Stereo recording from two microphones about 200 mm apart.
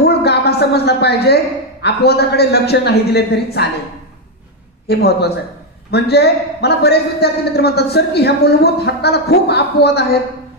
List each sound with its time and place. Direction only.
0.0 s a woman's voice: 55° left (ahead or behind)
4.8 s a man's voice: 55° left (ahead or behind)